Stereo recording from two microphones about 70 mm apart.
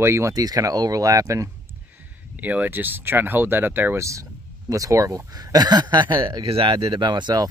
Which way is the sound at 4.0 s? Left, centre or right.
Right.